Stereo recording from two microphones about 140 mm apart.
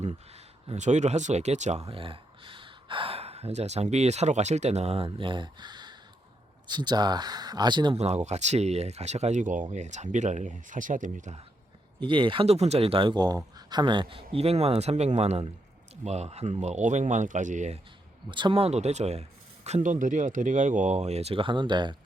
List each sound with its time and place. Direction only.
0.7 s speech: 55° right (ahead or behind); by 7.9 s 30° right (ahead or behind)
7.9 s speech: 50° right (ahead or behind)
12.0 s speech: 35° right (ahead or behind); by 17.7 s 60° right (ahead or behind)
18.3 s speech: 35° right (ahead or behind)